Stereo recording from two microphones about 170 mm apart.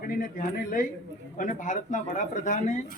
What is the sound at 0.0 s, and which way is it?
Speech, 55° left (ahead or behind).